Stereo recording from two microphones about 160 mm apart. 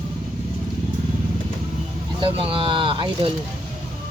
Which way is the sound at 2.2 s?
35° right (ahead or behind).